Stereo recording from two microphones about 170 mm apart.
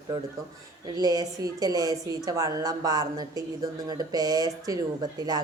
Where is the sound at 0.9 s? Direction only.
20° right (ahead or behind).